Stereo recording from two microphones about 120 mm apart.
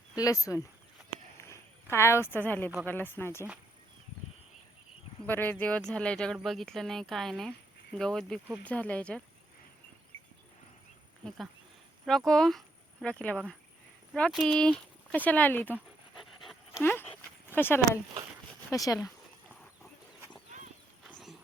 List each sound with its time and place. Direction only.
0.2 s speech: 30° left (ahead or behind)
1.4 s a sound: 20° left (ahead or behind)
2.8 s speech: 15° left (ahead or behind)
5.2 s speech: 15° left (ahead or behind)
12.0 s speech: 5° left (ahead or behind)
16.2 s dog: centre (ahead or behind)
16.8 s speech: 15° left (ahead or behind)
18.7 s speech: 30° left (ahead or behind)
21.1 s wild animals: 5° left (ahead or behind)